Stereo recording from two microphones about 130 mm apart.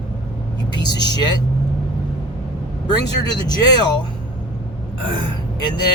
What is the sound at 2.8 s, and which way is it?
Speech, 30° left (ahead or behind).